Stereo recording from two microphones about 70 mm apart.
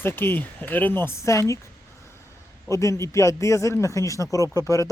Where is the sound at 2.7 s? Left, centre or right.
Left.